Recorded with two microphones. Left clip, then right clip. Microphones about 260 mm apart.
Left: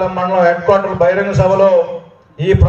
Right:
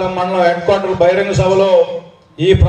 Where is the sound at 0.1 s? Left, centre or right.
Right.